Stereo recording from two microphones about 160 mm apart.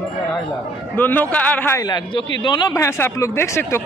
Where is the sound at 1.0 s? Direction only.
10° left (ahead or behind).